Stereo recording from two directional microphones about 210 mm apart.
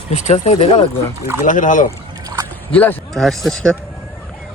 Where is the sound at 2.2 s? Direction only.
15° right (ahead or behind).